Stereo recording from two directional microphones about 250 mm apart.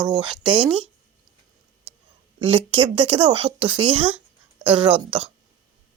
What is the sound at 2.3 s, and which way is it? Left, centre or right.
Speech, right.